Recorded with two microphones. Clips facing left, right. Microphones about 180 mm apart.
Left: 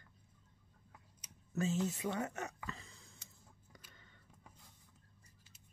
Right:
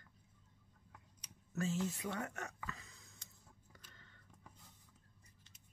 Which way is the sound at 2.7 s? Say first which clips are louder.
Left 2 dB; 30° left (ahead or behind).